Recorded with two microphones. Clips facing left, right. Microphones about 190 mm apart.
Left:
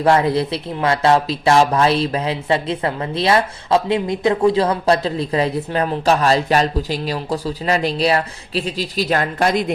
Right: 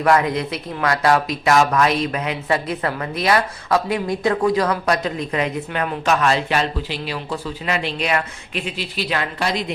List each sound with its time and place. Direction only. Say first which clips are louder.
0.0 s speech: left 2 dB; 30° left (ahead or behind); by 9.7 s 50° left (ahead or behind)